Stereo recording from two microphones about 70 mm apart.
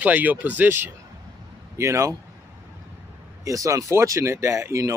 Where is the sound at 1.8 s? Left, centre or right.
Right.